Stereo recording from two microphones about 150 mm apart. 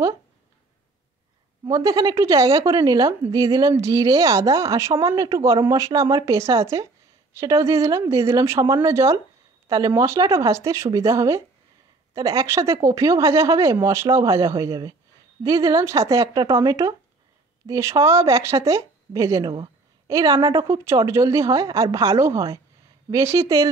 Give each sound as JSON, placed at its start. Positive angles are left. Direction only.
{"t": 1.6, "sound": "a woman's voice", "side_deg": -25}